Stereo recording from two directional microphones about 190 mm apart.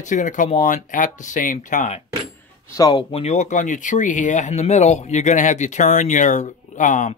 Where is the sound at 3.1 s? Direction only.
35° left (ahead or behind).